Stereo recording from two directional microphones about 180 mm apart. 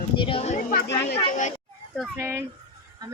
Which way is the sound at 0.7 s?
55° left (ahead or behind).